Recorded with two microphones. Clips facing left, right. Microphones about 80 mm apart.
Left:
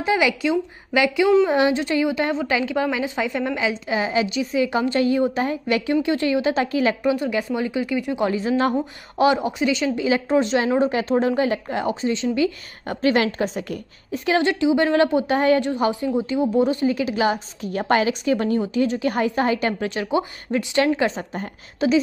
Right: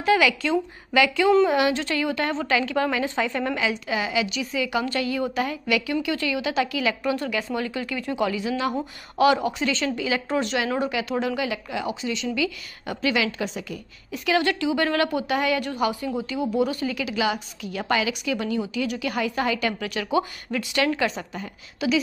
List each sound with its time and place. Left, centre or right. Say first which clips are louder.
0.0 s a woman's voice: even; left
3.5 s a woman's voice: left 3 dB; left
7.0 s a woman's voice: left 4 dB; left
8.3 s speech: left 5 dB; left
9.2 s a woman's voice: left 1 dB; left
10.0 s a woman's voice: left 8 dB; left
10.9 s speech: left 6 dB; left
14.1 s a woman's voice: left 3 dB; left
15.7 s a woman's voice: left 4 dB; left